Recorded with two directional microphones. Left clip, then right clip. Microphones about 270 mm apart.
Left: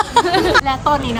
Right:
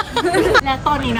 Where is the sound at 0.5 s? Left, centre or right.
Centre.